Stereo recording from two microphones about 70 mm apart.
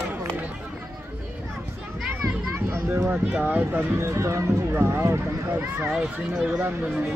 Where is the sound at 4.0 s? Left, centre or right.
Right.